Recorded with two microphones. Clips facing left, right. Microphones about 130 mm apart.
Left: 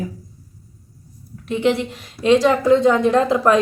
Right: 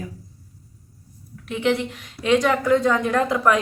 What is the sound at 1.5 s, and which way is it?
A woman's voice, 30° left (ahead or behind).